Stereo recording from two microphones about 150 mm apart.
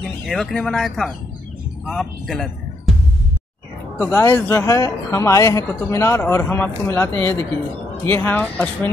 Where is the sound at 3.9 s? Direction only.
15° left (ahead or behind).